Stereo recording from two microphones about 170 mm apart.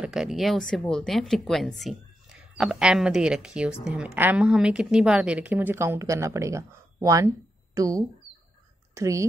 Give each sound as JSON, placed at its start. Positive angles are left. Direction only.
{"t": 0.0, "sound": "a woman's voice", "side_deg": -5}